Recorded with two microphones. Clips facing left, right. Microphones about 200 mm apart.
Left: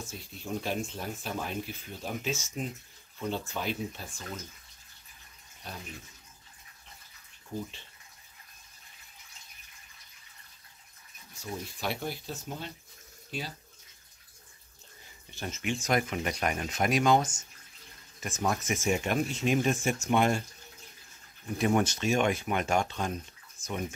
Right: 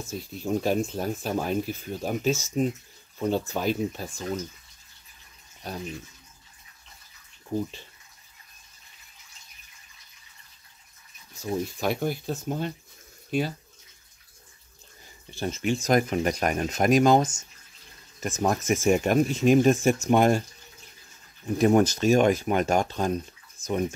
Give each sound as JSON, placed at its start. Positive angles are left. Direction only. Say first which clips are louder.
{"t": 0.1, "sound": "speech", "louder": "right 10 dB", "side_deg": -40}
{"t": 5.6, "sound": "speech", "louder": "right 8 dB", "side_deg": -40}
{"t": 11.4, "sound": "speech", "louder": "right 8 dB", "side_deg": -45}
{"t": 15.3, "sound": "speech", "louder": "right 7 dB", "side_deg": -30}
{"t": 21.5, "sound": "speech", "louder": "right 7 dB", "side_deg": -40}